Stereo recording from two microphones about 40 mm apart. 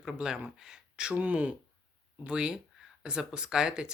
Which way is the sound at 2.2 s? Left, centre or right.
Right.